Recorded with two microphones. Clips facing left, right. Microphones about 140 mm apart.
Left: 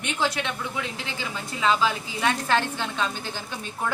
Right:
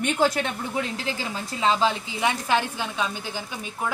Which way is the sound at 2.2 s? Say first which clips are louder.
Even; 15° right (ahead or behind).